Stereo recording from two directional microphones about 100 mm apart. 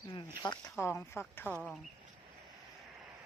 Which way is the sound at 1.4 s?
20° right (ahead or behind).